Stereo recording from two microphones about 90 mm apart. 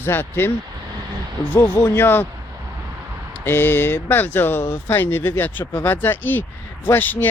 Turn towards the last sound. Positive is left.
turn(degrees=20)  # may be behind; listen again after turning